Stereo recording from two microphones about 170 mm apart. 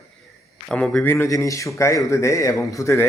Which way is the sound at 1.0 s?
15° left (ahead or behind).